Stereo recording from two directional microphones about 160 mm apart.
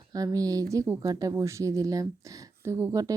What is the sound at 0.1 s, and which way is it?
Speech, 20° right (ahead or behind).